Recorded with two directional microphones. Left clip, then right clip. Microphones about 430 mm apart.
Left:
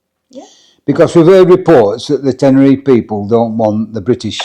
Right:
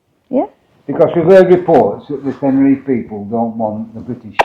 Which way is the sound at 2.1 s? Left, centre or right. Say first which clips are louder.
Left 9 dB; left.